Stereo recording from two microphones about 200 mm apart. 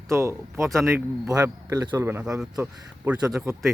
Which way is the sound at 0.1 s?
15° right (ahead or behind).